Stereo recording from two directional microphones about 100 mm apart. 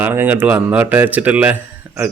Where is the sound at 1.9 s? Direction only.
15° right (ahead or behind).